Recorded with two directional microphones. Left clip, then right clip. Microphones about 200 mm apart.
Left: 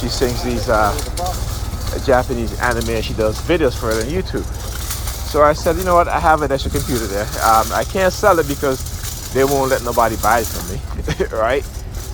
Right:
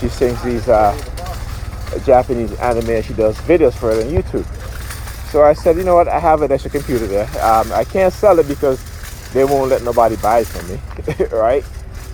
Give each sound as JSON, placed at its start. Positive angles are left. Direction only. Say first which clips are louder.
{"t": 0.7, "sound": "speech", "louder": "right 4 dB", "side_deg": -40}
{"t": 2.0, "sound": "speech", "louder": "right 4 dB", "side_deg": -40}